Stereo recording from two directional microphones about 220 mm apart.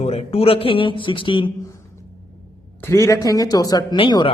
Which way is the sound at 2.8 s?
15° left (ahead or behind).